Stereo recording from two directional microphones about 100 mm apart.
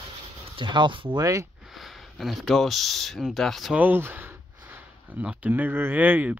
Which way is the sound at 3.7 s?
20° right (ahead or behind).